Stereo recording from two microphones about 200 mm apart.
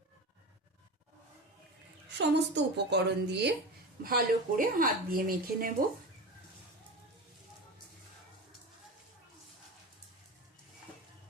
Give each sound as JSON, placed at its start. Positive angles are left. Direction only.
{"t": 2.1, "sound": "a woman's voice", "side_deg": -60}
{"t": 4.0, "sound": "speech", "side_deg": -45}